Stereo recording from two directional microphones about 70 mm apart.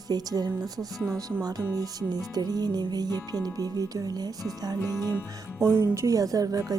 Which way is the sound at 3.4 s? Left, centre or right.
Right.